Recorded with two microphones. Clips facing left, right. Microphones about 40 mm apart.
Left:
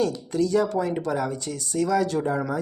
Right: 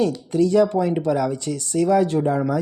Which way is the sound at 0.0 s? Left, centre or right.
Right.